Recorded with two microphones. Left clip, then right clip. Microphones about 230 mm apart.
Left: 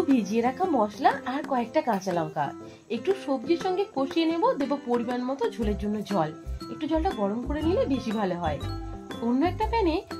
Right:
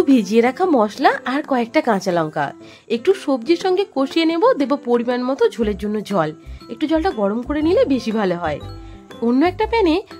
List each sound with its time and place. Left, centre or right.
0.1 s a woman's voice: right